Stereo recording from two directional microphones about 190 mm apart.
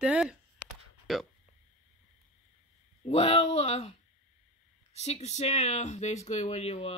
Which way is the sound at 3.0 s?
35° left (ahead or behind).